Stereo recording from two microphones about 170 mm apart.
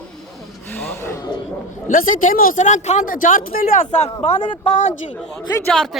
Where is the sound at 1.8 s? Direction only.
50° left (ahead or behind).